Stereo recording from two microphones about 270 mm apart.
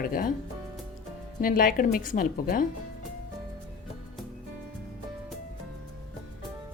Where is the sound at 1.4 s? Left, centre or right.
Left.